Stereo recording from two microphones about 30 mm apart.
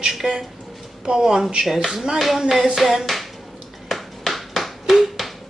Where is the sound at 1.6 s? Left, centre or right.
Centre.